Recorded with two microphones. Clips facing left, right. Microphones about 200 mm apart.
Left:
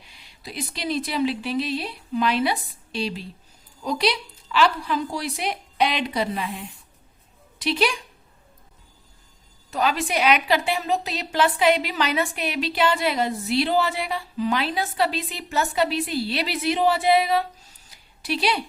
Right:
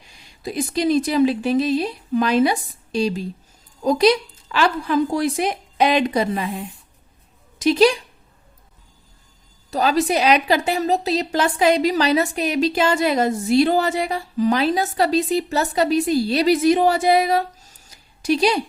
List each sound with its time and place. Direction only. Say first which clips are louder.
0.1 s a woman's voice: right 9 dB; 45° right (ahead or behind)
9.6 s a woman's voice: right 5 dB; 35° right (ahead or behind)